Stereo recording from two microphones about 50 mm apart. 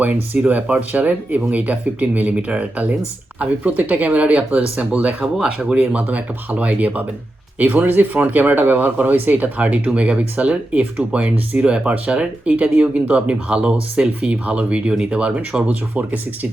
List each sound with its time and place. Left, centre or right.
0.0 s speech: right
15.6 s speech: right